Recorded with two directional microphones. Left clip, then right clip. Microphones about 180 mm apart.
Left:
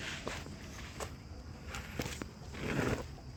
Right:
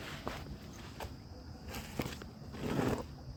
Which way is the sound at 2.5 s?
30° right (ahead or behind).